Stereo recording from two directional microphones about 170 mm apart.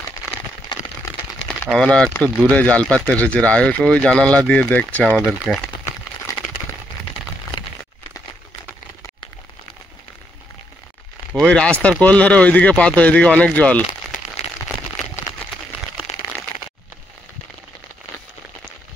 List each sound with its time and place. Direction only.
0.7 s a sound: 30° left (ahead or behind)
1.7 s speech: 5° left (ahead or behind)
11.3 s speech: 5° left (ahead or behind)